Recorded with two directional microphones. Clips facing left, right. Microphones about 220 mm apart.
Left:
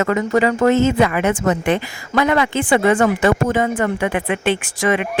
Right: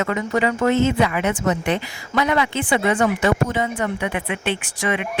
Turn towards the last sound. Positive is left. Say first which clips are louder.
# left 5 dB
turn(degrees=45)  # may be behind; listen again after turning